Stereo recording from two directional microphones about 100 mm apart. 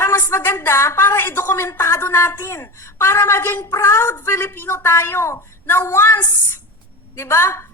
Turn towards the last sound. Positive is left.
turn(degrees=25)  # may be behind; listen again after turning